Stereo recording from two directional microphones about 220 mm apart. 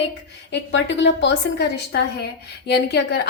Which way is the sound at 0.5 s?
55° left (ahead or behind).